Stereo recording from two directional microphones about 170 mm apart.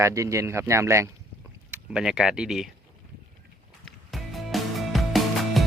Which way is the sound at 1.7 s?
5° right (ahead or behind).